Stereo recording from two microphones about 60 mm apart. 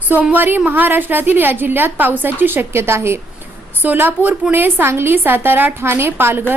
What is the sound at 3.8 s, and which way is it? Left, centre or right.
A woman's voice, right.